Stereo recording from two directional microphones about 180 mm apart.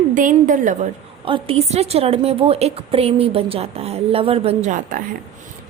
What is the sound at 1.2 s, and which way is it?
A woman's voice, 30° right (ahead or behind).